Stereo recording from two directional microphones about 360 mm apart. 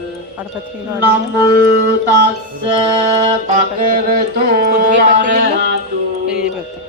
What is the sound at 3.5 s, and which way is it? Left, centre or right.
Mantra, right.